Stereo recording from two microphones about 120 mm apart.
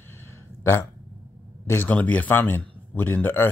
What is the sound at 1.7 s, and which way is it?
Speech, 15° left (ahead or behind).